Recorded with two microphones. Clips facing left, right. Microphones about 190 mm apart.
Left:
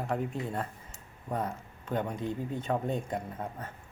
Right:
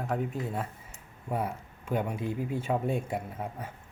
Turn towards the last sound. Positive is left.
turn(degrees=-10)  # may be behind; listen again after turning